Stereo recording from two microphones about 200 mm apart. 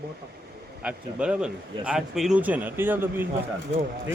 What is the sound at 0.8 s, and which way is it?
A man's voice, 5° right (ahead or behind).